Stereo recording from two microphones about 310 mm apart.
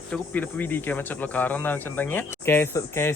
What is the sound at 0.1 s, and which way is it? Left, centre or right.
Speech, centre.